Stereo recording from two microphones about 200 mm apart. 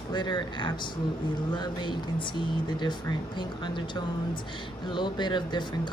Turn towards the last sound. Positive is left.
turn(degrees=20)  # may be behind; listen again after turning